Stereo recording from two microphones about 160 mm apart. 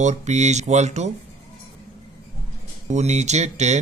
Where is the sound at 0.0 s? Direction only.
45° right (ahead or behind).